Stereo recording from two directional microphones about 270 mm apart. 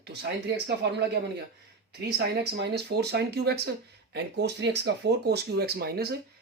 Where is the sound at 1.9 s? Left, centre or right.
Right.